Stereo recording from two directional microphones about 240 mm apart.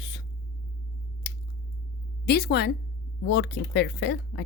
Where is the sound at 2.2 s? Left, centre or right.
Left.